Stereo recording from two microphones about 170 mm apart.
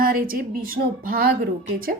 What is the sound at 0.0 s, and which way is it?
Speech, 60° right (ahead or behind).